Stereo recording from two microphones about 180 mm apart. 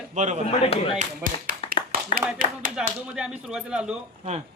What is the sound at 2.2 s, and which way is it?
Speech, 5° right (ahead or behind).